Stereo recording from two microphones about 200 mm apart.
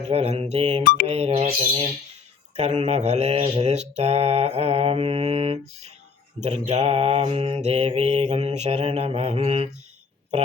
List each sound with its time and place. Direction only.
0.0 s mantra: 30° right (ahead or behind)
1.0 s speech: 30° right (ahead or behind)
2.6 s mantra: 30° right (ahead or behind)